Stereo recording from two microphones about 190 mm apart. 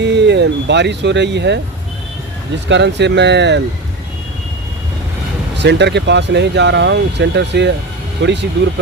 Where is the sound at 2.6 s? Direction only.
65° right (ahead or behind).